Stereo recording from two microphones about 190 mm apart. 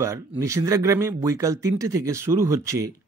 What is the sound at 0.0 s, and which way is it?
Speech, 15° right (ahead or behind).